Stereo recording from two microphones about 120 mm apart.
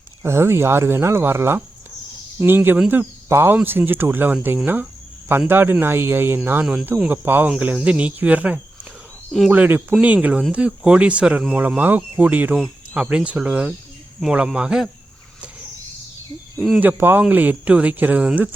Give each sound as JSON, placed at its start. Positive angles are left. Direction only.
{"t": 0.2, "sound": "speech", "side_deg": -20}
{"t": 16.8, "sound": "speech", "side_deg": -15}